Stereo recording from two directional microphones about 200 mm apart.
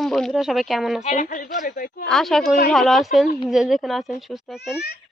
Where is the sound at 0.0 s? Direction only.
Centre (ahead or behind).